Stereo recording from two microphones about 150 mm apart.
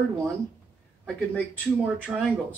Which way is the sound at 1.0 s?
10° left (ahead or behind).